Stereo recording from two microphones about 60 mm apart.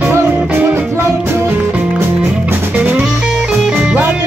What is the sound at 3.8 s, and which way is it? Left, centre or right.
Music, right.